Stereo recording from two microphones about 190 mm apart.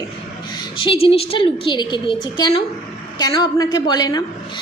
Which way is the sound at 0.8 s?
25° left (ahead or behind).